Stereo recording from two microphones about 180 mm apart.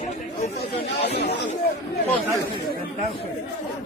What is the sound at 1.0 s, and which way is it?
Speech, 65° left (ahead or behind).